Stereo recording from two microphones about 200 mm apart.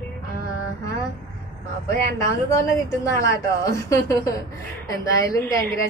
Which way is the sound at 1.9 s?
15° left (ahead or behind).